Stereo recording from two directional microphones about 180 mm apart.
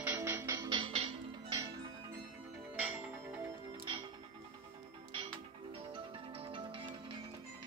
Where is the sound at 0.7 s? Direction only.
30° right (ahead or behind).